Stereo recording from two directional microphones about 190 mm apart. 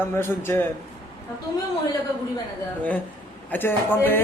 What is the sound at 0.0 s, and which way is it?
Speech, 10° left (ahead or behind).